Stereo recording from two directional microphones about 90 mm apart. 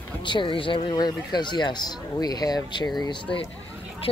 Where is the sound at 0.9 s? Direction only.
50° left (ahead or behind).